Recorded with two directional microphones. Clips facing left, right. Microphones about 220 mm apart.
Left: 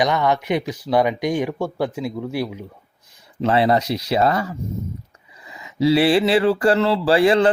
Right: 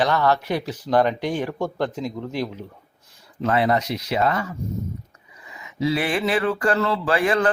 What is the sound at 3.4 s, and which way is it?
Speech, 30° left (ahead or behind).